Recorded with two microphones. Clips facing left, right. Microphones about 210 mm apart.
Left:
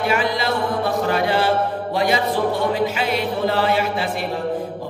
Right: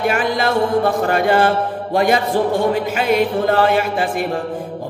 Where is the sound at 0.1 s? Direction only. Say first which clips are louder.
Right 3 dB; 50° right (ahead or behind).